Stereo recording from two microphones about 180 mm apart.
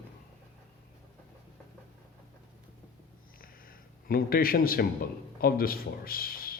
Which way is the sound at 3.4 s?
55° left (ahead or behind).